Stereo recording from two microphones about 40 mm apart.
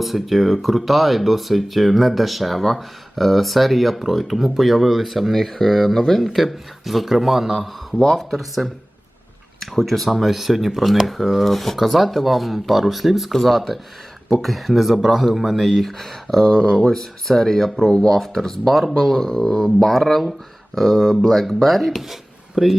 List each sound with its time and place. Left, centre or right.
0.0 s speech: centre
6.2 s speech: centre
16.5 s speech: left
16.9 s speech: centre